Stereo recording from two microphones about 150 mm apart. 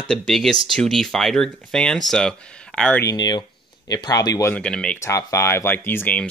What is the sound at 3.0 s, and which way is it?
Speech, 25° left (ahead or behind).